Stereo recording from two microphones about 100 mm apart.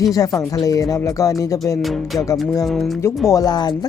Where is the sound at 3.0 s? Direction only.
30° left (ahead or behind).